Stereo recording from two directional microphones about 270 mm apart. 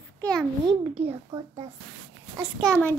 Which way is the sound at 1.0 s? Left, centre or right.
Centre.